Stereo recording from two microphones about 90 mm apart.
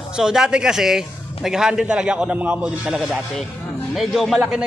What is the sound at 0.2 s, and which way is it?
A man's voice, 5° right (ahead or behind).